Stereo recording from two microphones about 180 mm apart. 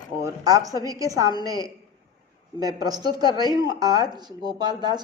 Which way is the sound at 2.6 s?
20° right (ahead or behind).